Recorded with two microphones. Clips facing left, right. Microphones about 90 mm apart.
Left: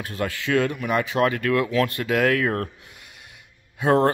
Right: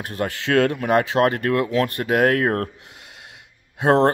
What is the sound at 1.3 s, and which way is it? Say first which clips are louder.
Speech: right 1 dB; 45° right (ahead or behind).